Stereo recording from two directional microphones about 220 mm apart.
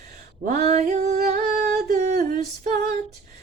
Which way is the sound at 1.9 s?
35° right (ahead or behind).